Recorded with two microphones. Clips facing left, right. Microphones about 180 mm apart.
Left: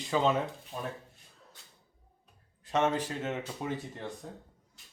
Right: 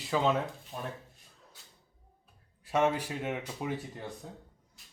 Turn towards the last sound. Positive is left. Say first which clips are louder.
# even
turn(degrees=-5)  # may be behind; listen again after turning